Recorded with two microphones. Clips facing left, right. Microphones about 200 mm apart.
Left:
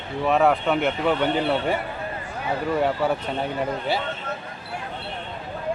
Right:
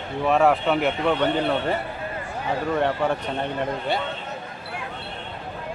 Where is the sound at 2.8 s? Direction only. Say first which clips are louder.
Left 1 dB; 5° left (ahead or behind).